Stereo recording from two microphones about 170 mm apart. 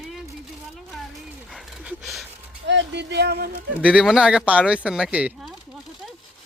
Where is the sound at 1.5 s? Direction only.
Centre (ahead or behind).